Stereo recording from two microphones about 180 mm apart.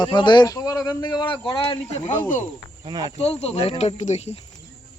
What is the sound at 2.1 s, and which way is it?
Speech, 45° left (ahead or behind).